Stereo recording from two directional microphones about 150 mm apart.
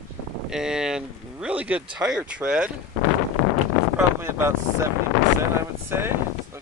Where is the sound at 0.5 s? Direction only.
5° right (ahead or behind).